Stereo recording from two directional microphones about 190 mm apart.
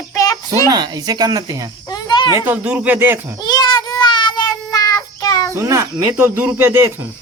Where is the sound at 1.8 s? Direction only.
20° left (ahead or behind).